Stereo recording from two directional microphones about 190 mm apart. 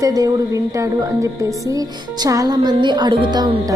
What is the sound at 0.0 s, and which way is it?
Music, 20° right (ahead or behind).